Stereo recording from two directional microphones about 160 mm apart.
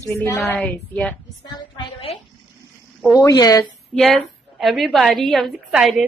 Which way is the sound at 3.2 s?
20° left (ahead or behind).